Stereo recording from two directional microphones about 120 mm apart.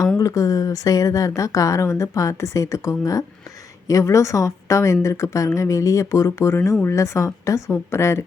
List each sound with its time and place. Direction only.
0.2 s a woman's voice: 30° left (ahead or behind)